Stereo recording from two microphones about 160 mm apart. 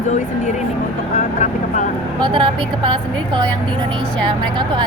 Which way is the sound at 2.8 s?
30° right (ahead or behind).